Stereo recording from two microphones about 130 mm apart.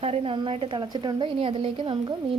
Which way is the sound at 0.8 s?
35° right (ahead or behind).